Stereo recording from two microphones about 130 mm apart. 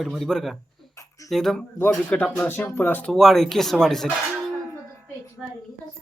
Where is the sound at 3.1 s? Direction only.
Centre (ahead or behind).